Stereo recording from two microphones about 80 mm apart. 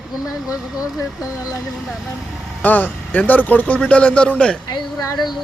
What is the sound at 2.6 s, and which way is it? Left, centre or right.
Speech, left.